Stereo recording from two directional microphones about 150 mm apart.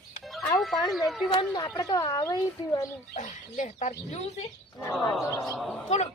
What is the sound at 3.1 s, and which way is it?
Speech, 55° left (ahead or behind).